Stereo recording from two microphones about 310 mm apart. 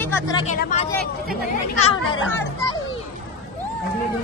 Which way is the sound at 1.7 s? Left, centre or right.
Left.